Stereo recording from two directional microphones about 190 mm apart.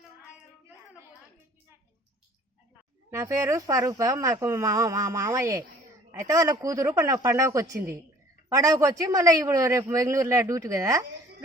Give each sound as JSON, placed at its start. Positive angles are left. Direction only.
{"t": 3.1, "sound": "a man's voice", "side_deg": -15}